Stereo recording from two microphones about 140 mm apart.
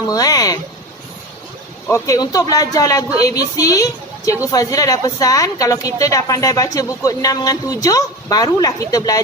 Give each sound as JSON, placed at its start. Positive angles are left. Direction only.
{"t": 0.1, "sound": "a woman's voice", "side_deg": 25}
{"t": 1.9, "sound": "a woman's voice", "side_deg": 25}